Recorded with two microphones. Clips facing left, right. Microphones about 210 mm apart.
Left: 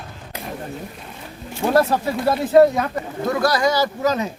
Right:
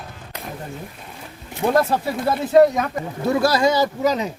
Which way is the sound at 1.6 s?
15° right (ahead or behind).